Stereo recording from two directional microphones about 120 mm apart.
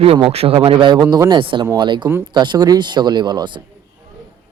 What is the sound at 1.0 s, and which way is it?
Speech, 30° right (ahead or behind).